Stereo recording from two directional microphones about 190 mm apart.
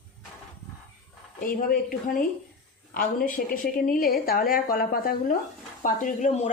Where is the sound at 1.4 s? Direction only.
50° left (ahead or behind).